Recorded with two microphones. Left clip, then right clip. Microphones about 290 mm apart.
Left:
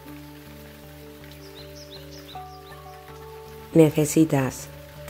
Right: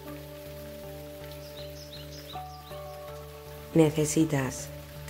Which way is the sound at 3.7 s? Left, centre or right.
Centre.